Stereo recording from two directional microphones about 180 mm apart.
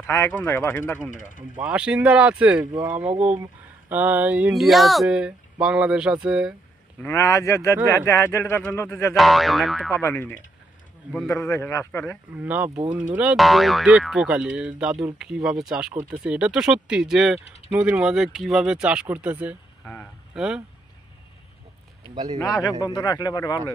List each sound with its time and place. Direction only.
0.0 s speech: 15° left (ahead or behind)
1.5 s speech: 5° right (ahead or behind)
7.0 s speech: 15° left (ahead or behind)
9.1 s speech: centre (ahead or behind)
10.0 s speech: 10° left (ahead or behind)
12.4 s speech: 10° right (ahead or behind)
22.4 s speech: 20° left (ahead or behind)